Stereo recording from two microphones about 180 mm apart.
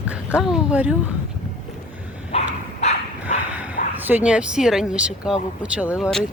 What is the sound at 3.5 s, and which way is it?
Dog, 10° right (ahead or behind).